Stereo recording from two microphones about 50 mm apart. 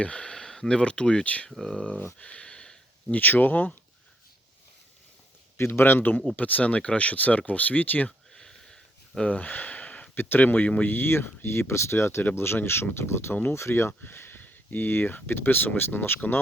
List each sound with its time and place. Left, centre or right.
0.0 s speech: left
0.3 s speech: centre; by 1.5 s left
1.5 s speech: centre
1.7 s speech: left
2.1 s a sound: left
3.1 s speech: left
5.5 s speech: left
8.3 s a sound: centre
9.2 s a sound: left
10.2 s speech: left
10.8 s speech: left
11.7 s speech: left
14.0 s speech: left